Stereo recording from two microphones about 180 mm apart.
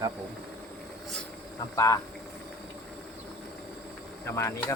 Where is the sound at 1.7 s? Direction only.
20° left (ahead or behind).